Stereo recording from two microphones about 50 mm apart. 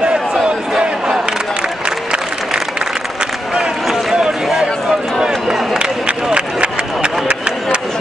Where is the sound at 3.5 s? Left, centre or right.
Centre.